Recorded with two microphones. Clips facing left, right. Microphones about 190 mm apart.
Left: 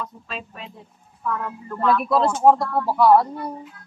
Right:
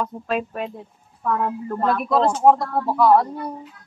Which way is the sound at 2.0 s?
Centre (ahead or behind).